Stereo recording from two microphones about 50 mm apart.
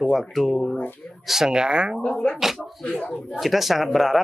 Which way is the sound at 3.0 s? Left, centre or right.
Centre.